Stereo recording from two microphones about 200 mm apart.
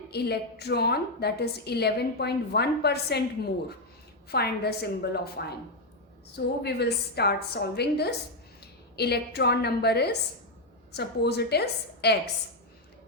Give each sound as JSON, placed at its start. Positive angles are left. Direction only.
{"t": 0.1, "sound": "a woman's voice", "side_deg": 55}
{"t": 4.3, "sound": "a woman's voice", "side_deg": 55}